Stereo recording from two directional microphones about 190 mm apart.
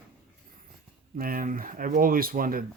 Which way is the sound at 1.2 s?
50° right (ahead or behind).